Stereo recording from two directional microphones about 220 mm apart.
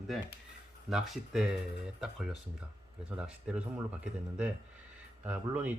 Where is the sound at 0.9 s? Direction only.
Centre (ahead or behind).